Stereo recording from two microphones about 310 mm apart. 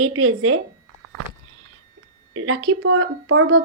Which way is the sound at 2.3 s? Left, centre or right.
Right.